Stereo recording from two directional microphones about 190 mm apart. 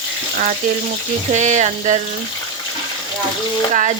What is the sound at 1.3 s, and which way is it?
Speech, 40° right (ahead or behind).